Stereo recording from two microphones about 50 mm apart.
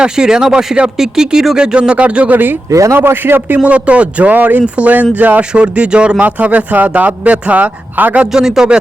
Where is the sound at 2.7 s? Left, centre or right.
Right.